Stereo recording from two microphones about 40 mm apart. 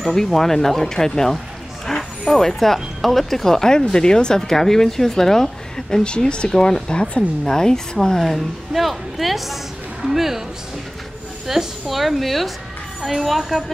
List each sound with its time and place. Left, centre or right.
0.0 s speech: centre
6.0 s speech: left
8.2 s a woman's voice: centre
11.4 s a woman's voice: centre